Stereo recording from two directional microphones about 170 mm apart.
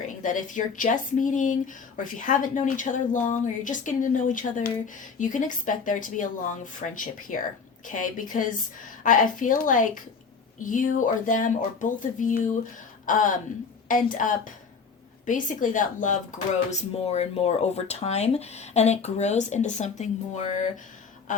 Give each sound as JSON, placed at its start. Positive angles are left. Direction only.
{"t": 0.1, "sound": "a woman's voice", "side_deg": 50}